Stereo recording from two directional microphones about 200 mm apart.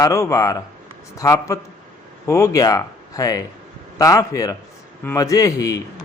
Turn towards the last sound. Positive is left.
turn(degrees=15)  # may be behind; listen again after turning